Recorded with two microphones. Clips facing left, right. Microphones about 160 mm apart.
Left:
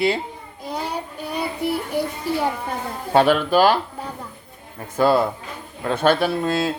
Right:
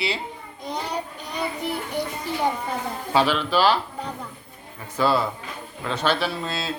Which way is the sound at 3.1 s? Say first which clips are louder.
Left 5 dB; 50° left (ahead or behind).